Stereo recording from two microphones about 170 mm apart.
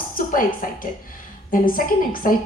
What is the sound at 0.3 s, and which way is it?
A woman's voice, 55° left (ahead or behind).